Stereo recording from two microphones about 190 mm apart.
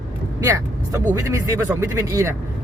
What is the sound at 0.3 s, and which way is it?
A man's voice, 15° right (ahead or behind).